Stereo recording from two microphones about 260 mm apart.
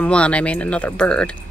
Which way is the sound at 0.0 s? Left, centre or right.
Centre.